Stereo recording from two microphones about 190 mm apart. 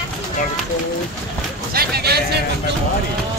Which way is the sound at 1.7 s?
55° right (ahead or behind).